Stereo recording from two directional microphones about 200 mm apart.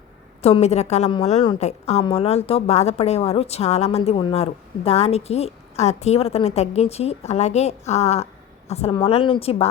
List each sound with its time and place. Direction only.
0.4 s a woman's voice: 30° left (ahead or behind)